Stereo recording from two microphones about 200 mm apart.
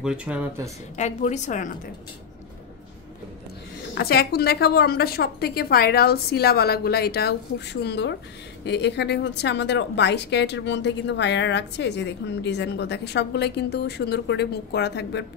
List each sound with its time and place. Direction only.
0.0 s speech: 5° right (ahead or behind)
0.9 s a woman's voice: 35° left (ahead or behind)
3.9 s a woman's voice: 50° left (ahead or behind)